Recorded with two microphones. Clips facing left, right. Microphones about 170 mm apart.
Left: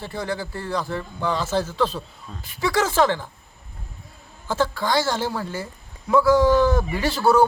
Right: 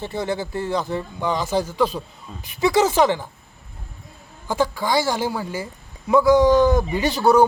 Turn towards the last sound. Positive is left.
turn(degrees=-15)  # may be behind; listen again after turning